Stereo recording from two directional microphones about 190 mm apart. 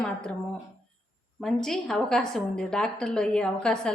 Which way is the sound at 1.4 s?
5° left (ahead or behind).